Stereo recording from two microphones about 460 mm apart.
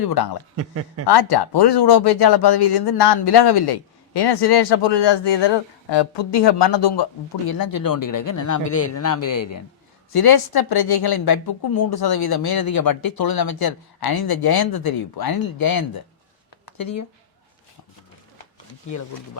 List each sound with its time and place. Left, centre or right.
0.0 s a woman's voice: left
0.5 s speech: right
1.0 s a woman's voice: left